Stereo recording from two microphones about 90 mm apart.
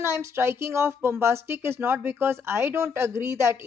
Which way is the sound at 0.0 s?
30° right (ahead or behind).